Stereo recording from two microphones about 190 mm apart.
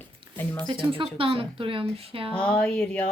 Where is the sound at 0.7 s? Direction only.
25° right (ahead or behind).